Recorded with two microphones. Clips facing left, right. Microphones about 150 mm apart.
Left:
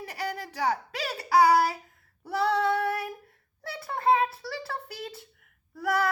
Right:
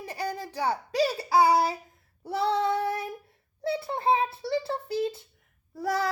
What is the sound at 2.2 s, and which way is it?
Female singing, 25° right (ahead or behind).